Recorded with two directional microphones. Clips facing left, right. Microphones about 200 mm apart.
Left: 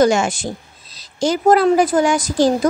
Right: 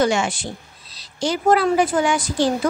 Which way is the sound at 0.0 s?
45° left (ahead or behind).